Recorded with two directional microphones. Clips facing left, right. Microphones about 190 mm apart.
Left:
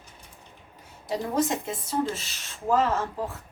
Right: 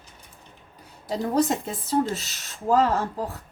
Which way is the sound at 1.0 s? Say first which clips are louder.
Right 3 dB; 40° right (ahead or behind).